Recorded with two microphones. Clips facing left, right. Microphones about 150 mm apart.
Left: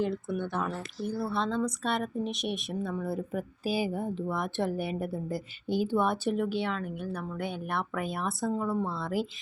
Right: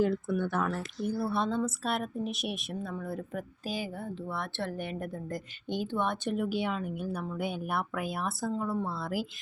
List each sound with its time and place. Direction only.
0.3 s speech: 20° left (ahead or behind)
0.6 s speech: 10° left (ahead or behind)
1.1 s a woman's voice: 10° right (ahead or behind)